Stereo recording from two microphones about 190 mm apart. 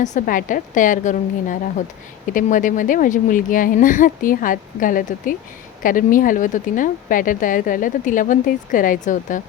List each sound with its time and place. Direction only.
0.0 s speech: 45° left (ahead or behind)